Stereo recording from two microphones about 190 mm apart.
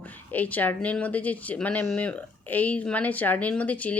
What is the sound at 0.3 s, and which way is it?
Speech, 10° left (ahead or behind).